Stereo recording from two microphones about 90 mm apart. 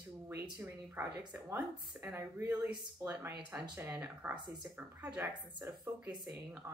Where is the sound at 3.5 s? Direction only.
20° right (ahead or behind).